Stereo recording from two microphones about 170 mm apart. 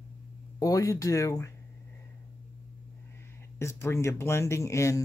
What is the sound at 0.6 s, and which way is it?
Speech, 20° left (ahead or behind).